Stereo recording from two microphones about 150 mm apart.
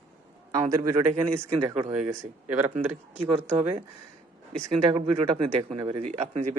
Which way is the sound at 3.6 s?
40° right (ahead or behind).